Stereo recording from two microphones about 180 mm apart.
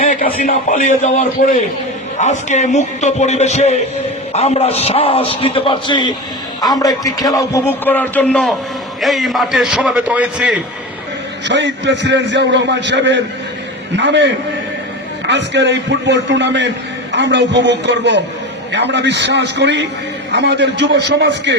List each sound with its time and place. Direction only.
0.0 s a man's voice: 45° left (ahead or behind); by 10.6 s 5° right (ahead or behind)
11.4 s a man's voice: 80° right